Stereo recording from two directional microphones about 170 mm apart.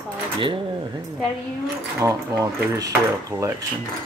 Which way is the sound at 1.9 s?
20° right (ahead or behind).